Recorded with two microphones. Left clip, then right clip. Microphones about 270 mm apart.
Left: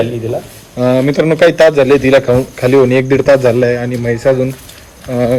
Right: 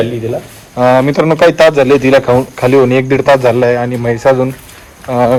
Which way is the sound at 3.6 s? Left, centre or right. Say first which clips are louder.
Right 2 dB; centre.